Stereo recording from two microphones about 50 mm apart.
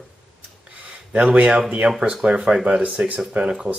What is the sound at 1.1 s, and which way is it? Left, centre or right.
Speech, right.